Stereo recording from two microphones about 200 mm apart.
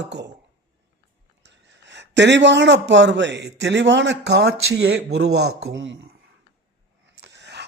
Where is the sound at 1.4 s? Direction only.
65° right (ahead or behind).